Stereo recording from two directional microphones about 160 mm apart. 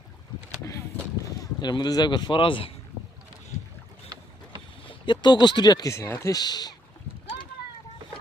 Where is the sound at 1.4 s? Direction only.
25° left (ahead or behind).